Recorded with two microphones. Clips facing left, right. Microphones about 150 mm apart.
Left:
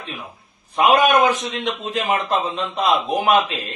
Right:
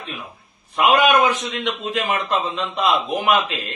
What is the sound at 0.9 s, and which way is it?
A man's voice, 40° left (ahead or behind).